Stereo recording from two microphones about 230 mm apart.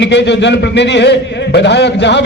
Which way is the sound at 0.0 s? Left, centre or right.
Left.